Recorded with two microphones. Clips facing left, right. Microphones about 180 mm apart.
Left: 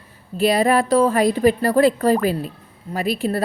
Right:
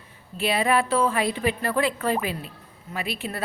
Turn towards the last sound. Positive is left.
turn(degrees=40)  # may be behind; listen again after turning